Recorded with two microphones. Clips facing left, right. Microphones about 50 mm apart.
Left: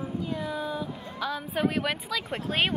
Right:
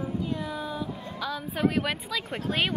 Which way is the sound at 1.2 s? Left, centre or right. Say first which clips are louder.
Left 2 dB; centre.